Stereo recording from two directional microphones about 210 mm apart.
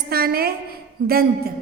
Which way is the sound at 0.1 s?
45° right (ahead or behind).